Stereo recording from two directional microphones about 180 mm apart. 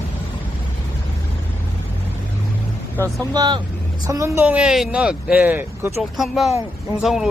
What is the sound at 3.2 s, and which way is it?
Speech, 20° right (ahead or behind).